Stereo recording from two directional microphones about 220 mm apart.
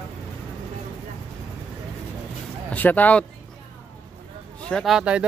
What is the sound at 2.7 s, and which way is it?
Speech, 5° left (ahead or behind).